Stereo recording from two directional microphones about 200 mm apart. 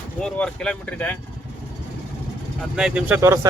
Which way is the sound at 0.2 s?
5° left (ahead or behind).